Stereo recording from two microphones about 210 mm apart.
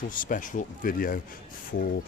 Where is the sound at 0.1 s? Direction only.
40° left (ahead or behind).